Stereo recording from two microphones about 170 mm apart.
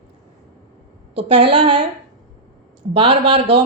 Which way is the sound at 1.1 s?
30° right (ahead or behind).